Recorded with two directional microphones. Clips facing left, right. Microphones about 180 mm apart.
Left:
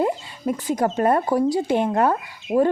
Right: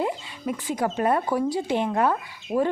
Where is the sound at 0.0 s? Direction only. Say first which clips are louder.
Left 5 dB; 40° left (ahead or behind).